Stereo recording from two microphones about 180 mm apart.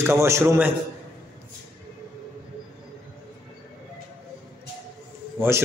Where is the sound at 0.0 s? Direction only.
15° right (ahead or behind).